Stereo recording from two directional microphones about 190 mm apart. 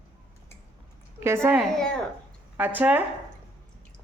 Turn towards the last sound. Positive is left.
turn(degrees=-10)  # may be behind; listen again after turning